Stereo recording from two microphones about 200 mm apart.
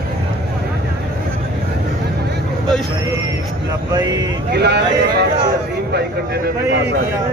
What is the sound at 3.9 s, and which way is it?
Speech, 20° right (ahead or behind).